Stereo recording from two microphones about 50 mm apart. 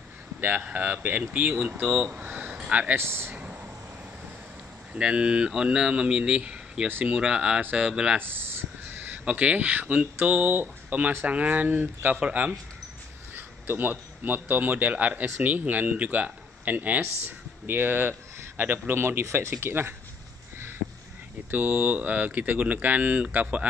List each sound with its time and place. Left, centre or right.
0.4 s speech: right
2.1 s a sound: right
3.0 s speech: right
4.9 s speech: right
8.2 s a sound: right
9.2 s speech: right
11.2 s speech: right
12.2 s speech: right
13.3 s speech: right
17.6 s speech: right
18.9 s speech: right
19.6 s speech: right
21.5 s speech: right